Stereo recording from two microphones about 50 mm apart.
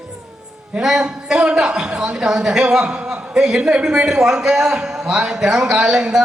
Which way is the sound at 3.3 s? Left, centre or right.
Centre.